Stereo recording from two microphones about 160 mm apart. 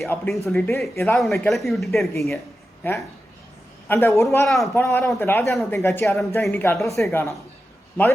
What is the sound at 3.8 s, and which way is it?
Speech, 15° left (ahead or behind).